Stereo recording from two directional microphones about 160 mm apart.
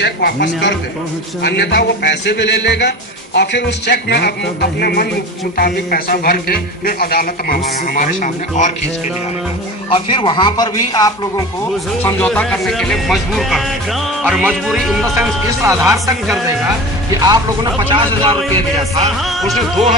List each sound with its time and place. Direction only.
0.0 s a man's voice: 90° left
4.7 s music: 75° left (ahead or behind)
5.6 s a man's voice: 70° left (ahead or behind); by 8.7 s 50° left (ahead or behind)
9.8 s speech: 30° left (ahead or behind)
12.0 s music: 10° left (ahead or behind)
15.1 s speech: 15° right (ahead or behind)
17.2 s speech: 30° right (ahead or behind)
19.2 s music: centre (ahead or behind)